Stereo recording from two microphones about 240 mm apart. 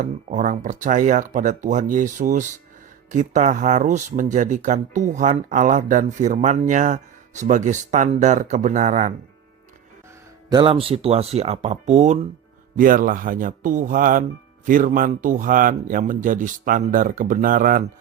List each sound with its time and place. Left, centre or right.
0.0 s speech: right
10.5 s speech: right